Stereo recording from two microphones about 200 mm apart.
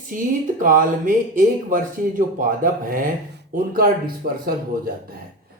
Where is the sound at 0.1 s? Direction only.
45° right (ahead or behind).